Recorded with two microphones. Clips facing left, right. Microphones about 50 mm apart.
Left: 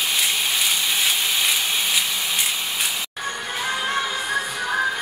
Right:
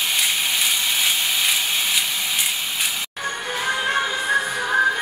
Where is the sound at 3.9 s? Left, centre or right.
Centre.